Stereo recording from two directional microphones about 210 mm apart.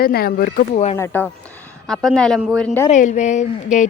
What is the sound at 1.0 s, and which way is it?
Speech, 10° left (ahead or behind).